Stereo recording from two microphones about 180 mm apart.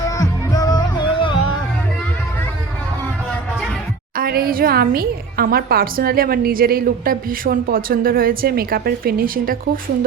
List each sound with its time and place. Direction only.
0.0 s music: 20° left (ahead or behind)
4.2 s a woman's voice: 55° right (ahead or behind)